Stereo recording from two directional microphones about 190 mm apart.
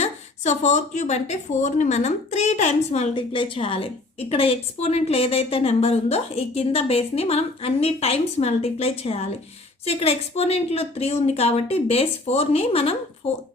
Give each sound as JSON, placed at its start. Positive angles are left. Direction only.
{"t": 0.0, "sound": "a woman's voice", "side_deg": 35}